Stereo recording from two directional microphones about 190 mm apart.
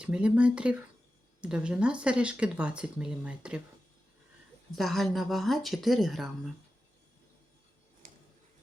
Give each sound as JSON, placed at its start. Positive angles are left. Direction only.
{"t": 0.0, "sound": "speech", "side_deg": -5}
{"t": 4.7, "sound": "speech", "side_deg": 0}